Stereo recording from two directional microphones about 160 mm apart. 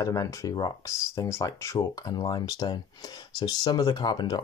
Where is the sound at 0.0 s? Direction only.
20° left (ahead or behind).